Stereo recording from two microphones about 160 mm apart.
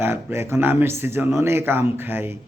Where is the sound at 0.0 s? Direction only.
15° right (ahead or behind).